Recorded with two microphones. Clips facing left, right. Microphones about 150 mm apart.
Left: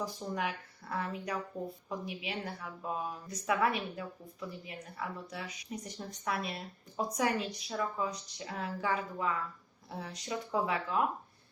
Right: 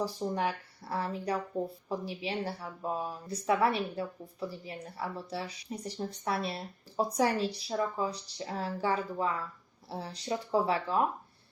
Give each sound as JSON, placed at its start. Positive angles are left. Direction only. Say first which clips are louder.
{"t": 0.0, "sound": "a woman's voice", "louder": "right 4 dB", "side_deg": -35}